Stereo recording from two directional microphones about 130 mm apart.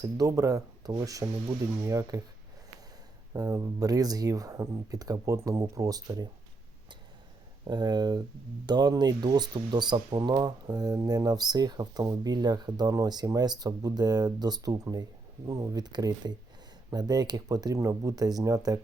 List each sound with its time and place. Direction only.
0.0 s speech: 25° right (ahead or behind)
3.3 s speech: 30° right (ahead or behind)
7.6 s speech: 35° right (ahead or behind)